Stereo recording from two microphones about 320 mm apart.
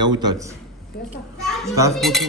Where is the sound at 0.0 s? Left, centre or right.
Centre.